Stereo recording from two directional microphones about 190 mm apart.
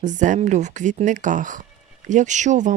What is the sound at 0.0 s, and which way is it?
Speech, 40° right (ahead or behind).